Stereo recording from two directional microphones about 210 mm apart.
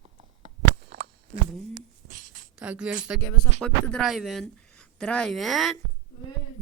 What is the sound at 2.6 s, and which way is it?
Speech, 5° right (ahead or behind).